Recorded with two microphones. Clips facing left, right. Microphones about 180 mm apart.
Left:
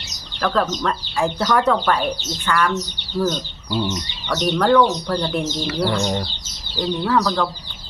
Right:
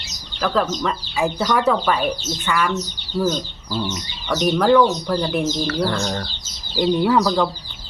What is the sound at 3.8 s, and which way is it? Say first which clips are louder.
Speech: left 2 dB; centre (ahead or behind).